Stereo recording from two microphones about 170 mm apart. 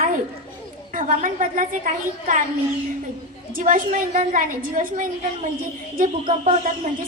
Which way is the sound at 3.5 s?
50° right (ahead or behind).